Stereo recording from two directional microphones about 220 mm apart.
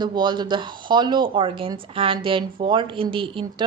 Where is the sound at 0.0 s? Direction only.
20° right (ahead or behind).